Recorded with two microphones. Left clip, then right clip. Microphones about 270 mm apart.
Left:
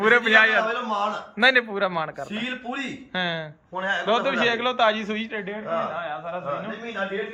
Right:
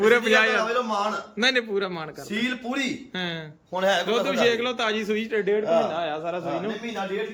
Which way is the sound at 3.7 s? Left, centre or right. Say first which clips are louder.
Right 4 dB; right.